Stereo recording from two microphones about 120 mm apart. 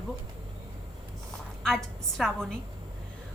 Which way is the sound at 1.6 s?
5° left (ahead or behind).